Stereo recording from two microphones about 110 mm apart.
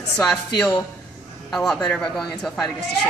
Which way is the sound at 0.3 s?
5° left (ahead or behind).